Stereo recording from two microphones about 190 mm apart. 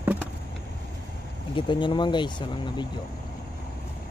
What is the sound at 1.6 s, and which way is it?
Speech, 25° left (ahead or behind).